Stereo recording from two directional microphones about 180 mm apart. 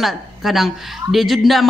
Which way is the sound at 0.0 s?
Centre (ahead or behind).